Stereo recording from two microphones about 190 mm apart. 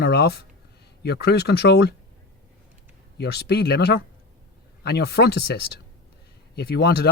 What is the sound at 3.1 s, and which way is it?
Speech, 60° left (ahead or behind).